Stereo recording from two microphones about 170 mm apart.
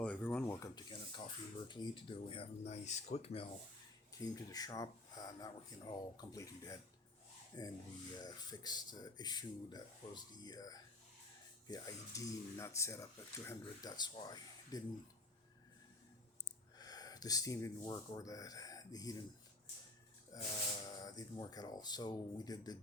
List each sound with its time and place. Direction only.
0.0 s speech: 10° left (ahead or behind); by 3.5 s 35° left (ahead or behind)
4.1 s speech: 20° left (ahead or behind)
16.7 s speech: 20° left (ahead or behind)
20.3 s a sound: 20° left (ahead or behind)
20.8 s speech: 20° left (ahead or behind)